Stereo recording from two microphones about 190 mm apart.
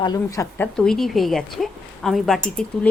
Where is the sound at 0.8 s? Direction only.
Centre (ahead or behind).